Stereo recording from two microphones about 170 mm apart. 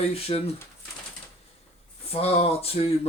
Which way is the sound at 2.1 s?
35° left (ahead or behind).